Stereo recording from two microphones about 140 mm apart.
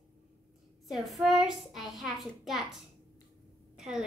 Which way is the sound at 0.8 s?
Centre (ahead or behind).